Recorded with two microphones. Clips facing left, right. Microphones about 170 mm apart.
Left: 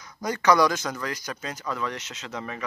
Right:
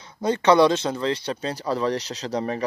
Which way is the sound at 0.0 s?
30° right (ahead or behind).